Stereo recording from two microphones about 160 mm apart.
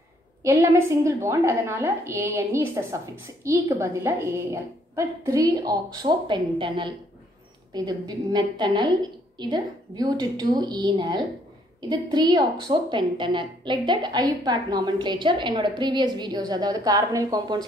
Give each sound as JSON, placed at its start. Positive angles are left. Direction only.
{"t": 0.4, "sound": "a woman's voice", "side_deg": -15}